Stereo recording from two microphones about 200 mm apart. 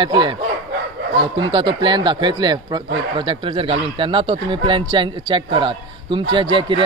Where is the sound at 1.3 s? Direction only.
25° right (ahead or behind).